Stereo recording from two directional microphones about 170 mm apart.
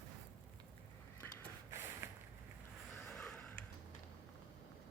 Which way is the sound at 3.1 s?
5° left (ahead or behind).